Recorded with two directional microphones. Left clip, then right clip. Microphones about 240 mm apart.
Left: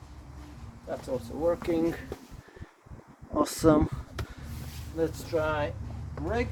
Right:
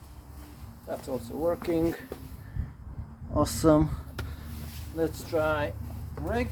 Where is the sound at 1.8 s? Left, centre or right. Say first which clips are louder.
Even; centre.